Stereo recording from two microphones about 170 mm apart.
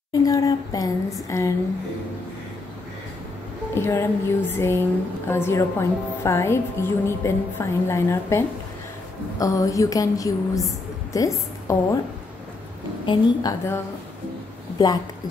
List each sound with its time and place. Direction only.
0.1 s speech: 20° left (ahead or behind)
3.7 s a woman's voice: 15° left (ahead or behind)
13.0 s speech: 25° left (ahead or behind)